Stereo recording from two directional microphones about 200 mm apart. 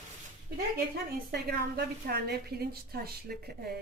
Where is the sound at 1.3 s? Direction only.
50° right (ahead or behind).